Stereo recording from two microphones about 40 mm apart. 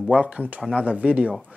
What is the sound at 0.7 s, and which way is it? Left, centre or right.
Speech, right.